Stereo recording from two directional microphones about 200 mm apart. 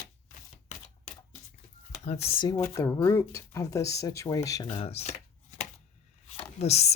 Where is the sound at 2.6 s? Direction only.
15° left (ahead or behind).